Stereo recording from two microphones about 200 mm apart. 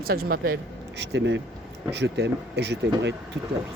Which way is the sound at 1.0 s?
60° right (ahead or behind).